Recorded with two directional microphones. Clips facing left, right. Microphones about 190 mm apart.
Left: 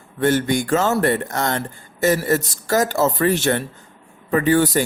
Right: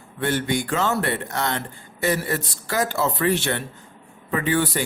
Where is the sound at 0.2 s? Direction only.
45° left (ahead or behind).